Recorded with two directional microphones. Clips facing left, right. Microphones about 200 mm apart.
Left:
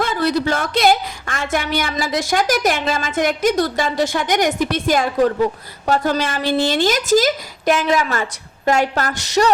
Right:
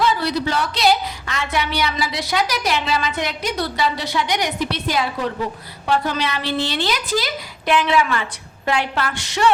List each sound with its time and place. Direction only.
0.0 s a woman's voice: 50° left (ahead or behind)